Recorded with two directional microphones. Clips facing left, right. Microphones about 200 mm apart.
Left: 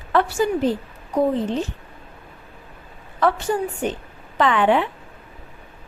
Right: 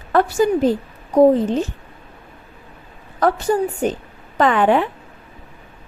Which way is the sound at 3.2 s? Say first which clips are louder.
Right 3 dB; 40° right (ahead or behind).